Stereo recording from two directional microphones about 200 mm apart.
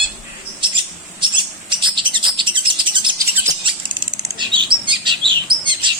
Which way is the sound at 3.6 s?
25° right (ahead or behind).